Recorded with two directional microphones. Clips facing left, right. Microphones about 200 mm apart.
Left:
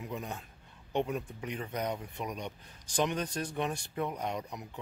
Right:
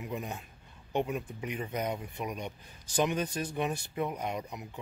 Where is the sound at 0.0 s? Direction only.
10° right (ahead or behind).